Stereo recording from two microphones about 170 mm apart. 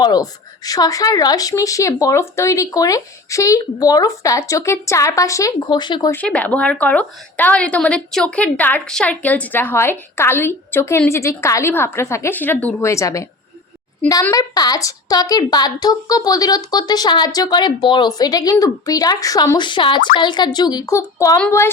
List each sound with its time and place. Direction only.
0.0 s a woman's voice: 20° left (ahead or behind)
6.1 s a woman's voice: 10° left (ahead or behind)